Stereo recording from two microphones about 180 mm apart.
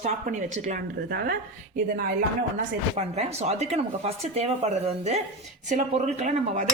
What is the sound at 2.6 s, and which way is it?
Speech, 40° right (ahead or behind).